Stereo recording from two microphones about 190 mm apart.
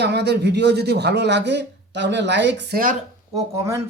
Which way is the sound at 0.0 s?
65° right (ahead or behind).